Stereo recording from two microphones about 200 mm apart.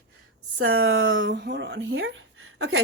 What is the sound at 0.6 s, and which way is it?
A woman's voice, 90° right.